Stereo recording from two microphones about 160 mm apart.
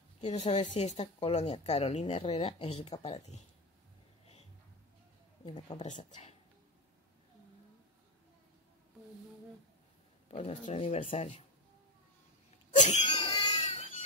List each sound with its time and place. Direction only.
0.2 s speech: 45° left (ahead or behind)
5.8 s speech: 50° left (ahead or behind)
10.2 s speech: 45° left (ahead or behind)
13.0 s a sound: 30° left (ahead or behind)